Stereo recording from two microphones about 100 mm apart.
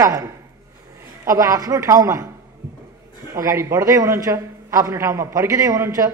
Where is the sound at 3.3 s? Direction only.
30° right (ahead or behind).